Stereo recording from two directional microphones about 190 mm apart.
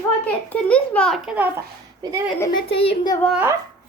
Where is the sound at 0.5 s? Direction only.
5° left (ahead or behind).